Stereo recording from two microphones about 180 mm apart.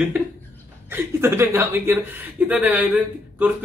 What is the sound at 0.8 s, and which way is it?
Speech, 10° right (ahead or behind).